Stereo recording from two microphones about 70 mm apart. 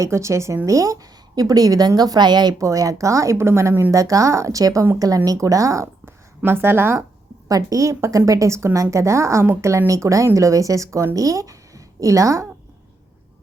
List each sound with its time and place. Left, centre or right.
0.0 s a woman's voice: right
2.0 s a woman's voice: right
2.6 s a woman's voice: right
3.9 s a woman's voice: right
7.4 s a woman's voice: right